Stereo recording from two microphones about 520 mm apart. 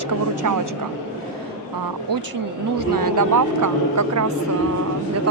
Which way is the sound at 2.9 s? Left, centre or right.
Right.